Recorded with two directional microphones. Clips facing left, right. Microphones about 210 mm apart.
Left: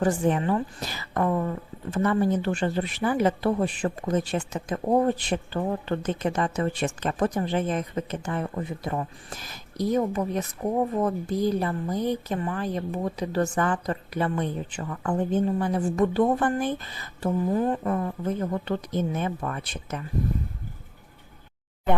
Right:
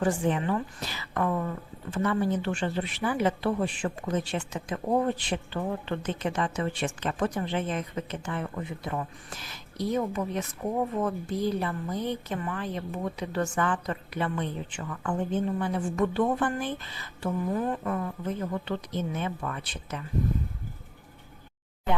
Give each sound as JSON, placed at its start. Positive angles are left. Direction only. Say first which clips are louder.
{"t": 0.0, "sound": "a woman's voice", "louder": "left 3 dB", "side_deg": 40}